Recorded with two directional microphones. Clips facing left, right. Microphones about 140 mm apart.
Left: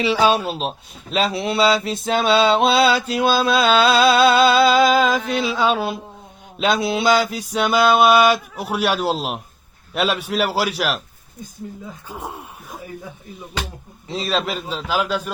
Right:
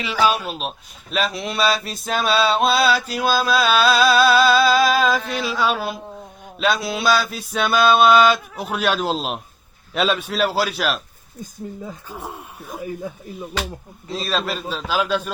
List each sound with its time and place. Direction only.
0.0 s mantra: 30° left (ahead or behind); by 10.9 s 15° left (ahead or behind)
12.0 s mantra: 15° left (ahead or behind)
14.1 s mantra: 20° left (ahead or behind)